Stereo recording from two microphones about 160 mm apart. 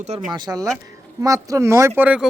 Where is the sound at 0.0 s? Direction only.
45° right (ahead or behind).